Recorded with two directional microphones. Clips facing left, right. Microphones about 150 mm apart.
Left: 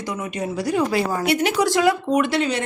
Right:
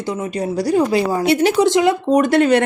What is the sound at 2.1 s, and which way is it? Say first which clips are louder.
Speech: right 7 dB; 45° right (ahead or behind).